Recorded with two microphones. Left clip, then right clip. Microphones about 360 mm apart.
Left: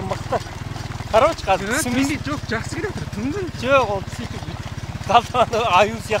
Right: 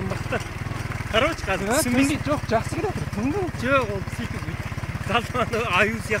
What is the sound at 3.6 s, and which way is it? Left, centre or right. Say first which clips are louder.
Speech: left 6 dB; centre.